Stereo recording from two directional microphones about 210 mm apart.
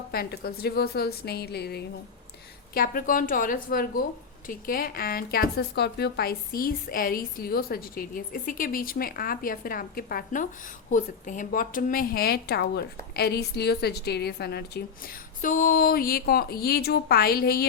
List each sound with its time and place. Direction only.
0.1 s a woman's voice: 45° left (ahead or behind)